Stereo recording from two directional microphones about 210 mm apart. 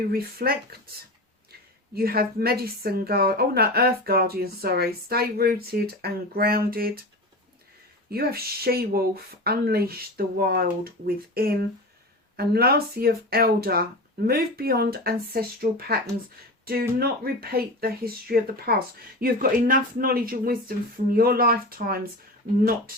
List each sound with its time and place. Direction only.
0.1 s a woman's voice: 45° right (ahead or behind)
2.0 s a woman's voice: 45° right (ahead or behind)
8.1 s a woman's voice: 50° right (ahead or behind)
17.0 s a woman's voice: 45° right (ahead or behind)